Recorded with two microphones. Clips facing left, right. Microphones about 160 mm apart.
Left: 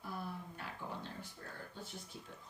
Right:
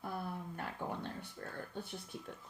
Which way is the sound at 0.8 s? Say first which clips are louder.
Right 4 dB; 55° right (ahead or behind).